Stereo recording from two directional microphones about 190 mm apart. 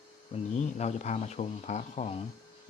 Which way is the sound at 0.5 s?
35° left (ahead or behind).